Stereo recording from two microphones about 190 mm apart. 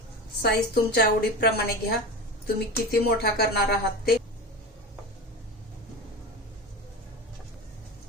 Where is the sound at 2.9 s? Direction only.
55° left (ahead or behind).